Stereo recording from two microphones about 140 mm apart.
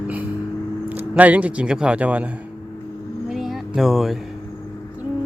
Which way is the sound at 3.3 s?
Centre (ahead or behind).